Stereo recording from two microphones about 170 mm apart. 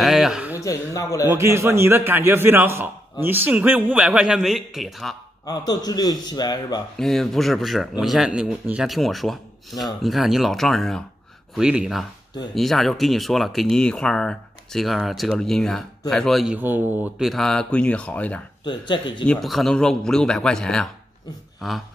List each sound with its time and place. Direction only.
0.0 s a sound: centre (ahead or behind)
0.6 s a man's voice: 20° left (ahead or behind)
1.3 s a man's voice: 15° right (ahead or behind); by 5.1 s centre (ahead or behind)
5.4 s a man's voice: 20° left (ahead or behind)
7.0 s speech: centre (ahead or behind)
16.5 s a man's voice: 10° right (ahead or behind)
17.3 s speech: centre (ahead or behind)
18.6 s a man's voice: 25° left (ahead or behind)
19.2 s speech: 5° left (ahead or behind)
21.5 s a sound: centre (ahead or behind)